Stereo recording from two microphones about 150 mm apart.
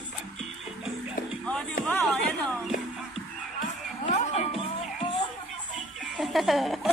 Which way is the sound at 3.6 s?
55° left (ahead or behind).